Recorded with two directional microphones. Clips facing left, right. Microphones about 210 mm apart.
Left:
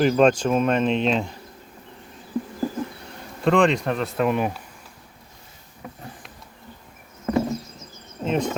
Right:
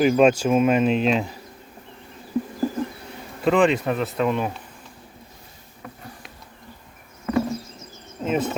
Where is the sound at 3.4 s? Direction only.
5° right (ahead or behind).